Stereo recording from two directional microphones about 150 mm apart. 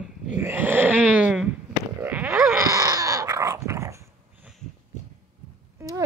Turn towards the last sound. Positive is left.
turn(degrees=-20)  # may be behind; listen again after turning